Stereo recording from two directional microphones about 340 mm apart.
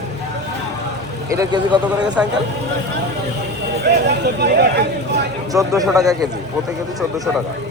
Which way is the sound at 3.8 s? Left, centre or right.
Right.